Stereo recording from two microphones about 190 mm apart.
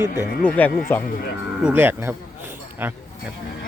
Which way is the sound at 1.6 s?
10° right (ahead or behind).